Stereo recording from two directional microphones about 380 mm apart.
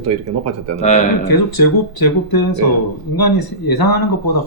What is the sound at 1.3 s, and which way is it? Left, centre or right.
Speech, left.